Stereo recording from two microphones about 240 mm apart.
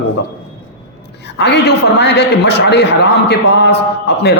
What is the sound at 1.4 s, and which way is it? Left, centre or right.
A man's voice, left.